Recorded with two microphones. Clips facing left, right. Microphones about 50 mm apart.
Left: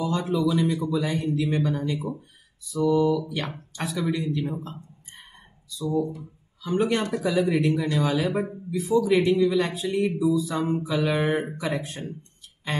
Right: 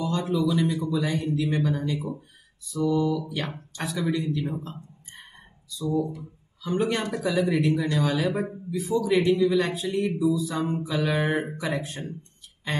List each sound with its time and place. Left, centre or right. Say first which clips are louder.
0.0 s speech: left 1 dB; centre
3.0 s speech: left 3 dB; centre